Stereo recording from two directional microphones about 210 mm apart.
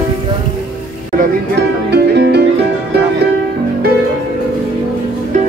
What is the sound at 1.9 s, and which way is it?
Music, 50° right (ahead or behind).